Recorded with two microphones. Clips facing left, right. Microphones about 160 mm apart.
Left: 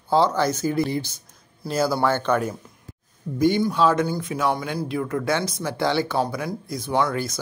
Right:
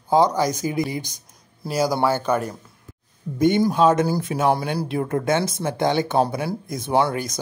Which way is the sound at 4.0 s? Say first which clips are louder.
Right 3 dB; 35° right (ahead or behind).